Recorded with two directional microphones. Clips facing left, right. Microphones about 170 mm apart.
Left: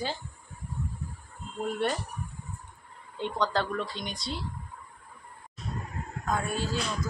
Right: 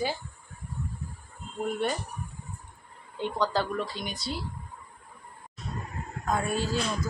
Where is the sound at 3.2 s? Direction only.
Centre (ahead or behind).